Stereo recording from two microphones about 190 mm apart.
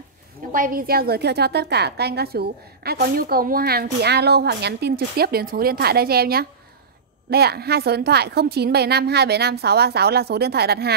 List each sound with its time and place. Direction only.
0.5 s a woman's voice: 45° right (ahead or behind)